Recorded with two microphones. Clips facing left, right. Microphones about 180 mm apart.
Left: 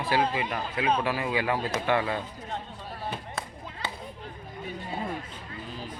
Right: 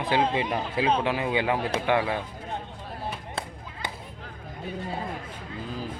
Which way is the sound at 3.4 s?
30° right (ahead or behind).